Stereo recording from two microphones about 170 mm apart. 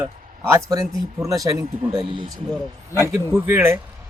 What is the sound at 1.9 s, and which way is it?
Speech, 30° right (ahead or behind).